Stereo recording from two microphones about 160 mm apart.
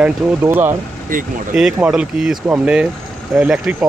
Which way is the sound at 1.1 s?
60° right (ahead or behind).